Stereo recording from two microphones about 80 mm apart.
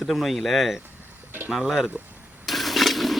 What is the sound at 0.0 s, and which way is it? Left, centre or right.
Speech, centre.